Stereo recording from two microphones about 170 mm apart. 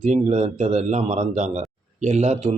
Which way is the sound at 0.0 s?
45° right (ahead or behind).